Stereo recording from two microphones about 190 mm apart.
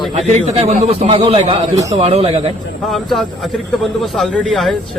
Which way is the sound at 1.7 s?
15° right (ahead or behind).